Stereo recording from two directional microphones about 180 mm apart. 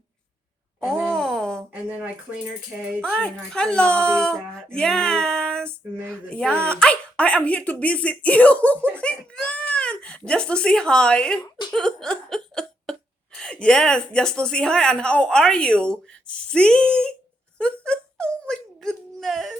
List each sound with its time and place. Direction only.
1.1 s a sound: 5° left (ahead or behind)
1.7 s speech: 5° right (ahead or behind)
3.0 s speech: 5° left (ahead or behind)
11.4 s a sound: 25° left (ahead or behind)
11.7 s speech: 5° left (ahead or behind)
17.6 s wail: 5° left (ahead or behind)